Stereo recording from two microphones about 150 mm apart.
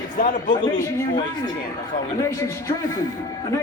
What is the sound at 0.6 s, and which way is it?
A man's voice, 25° left (ahead or behind).